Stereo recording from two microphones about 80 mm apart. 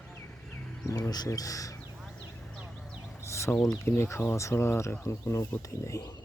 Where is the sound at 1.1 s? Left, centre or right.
Left.